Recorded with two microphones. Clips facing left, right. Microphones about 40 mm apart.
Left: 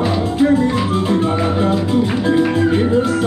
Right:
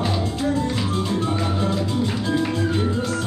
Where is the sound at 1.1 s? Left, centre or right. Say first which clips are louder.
Left 7 dB; left.